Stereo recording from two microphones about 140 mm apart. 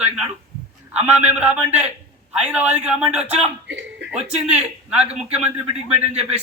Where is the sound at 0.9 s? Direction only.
10° right (ahead or behind).